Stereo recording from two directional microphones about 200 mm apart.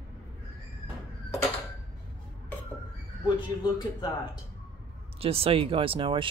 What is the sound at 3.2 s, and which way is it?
Speech, 20° left (ahead or behind).